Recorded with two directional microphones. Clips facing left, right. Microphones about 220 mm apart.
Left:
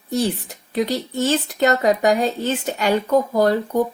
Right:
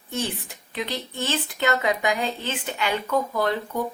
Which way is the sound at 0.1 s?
40° left (ahead or behind).